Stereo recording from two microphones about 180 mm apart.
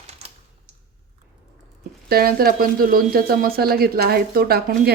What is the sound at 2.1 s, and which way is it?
Speech, 55° right (ahead or behind).